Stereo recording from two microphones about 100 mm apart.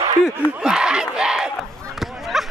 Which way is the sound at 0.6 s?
10° right (ahead or behind).